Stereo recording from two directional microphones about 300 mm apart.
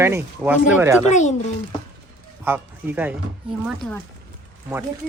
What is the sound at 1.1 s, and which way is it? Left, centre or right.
Speech, left.